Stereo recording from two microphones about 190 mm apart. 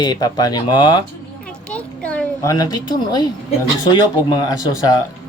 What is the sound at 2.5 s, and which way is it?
Speech, 20° left (ahead or behind).